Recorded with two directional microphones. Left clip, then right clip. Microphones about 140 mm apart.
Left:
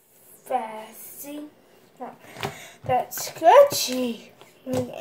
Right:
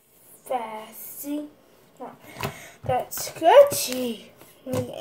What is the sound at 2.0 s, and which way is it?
Speech, centre (ahead or behind).